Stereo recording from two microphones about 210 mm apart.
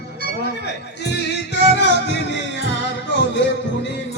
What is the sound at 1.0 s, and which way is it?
Music, 55° left (ahead or behind).